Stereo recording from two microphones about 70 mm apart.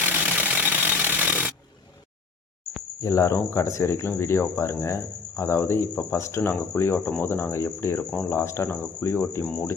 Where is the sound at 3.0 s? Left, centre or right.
Left.